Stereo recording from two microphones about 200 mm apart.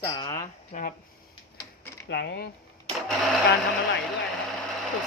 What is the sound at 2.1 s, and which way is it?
Speech, 55° left (ahead or behind).